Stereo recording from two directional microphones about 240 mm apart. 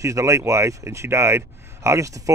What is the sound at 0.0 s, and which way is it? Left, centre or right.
A man's voice, centre.